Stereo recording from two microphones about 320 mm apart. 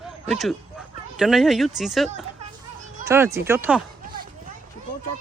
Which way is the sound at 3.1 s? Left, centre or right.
Centre.